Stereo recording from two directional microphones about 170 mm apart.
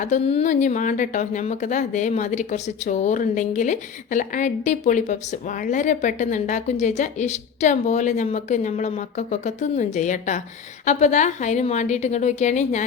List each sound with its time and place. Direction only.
0.0 s a woman's voice: 40° left (ahead or behind)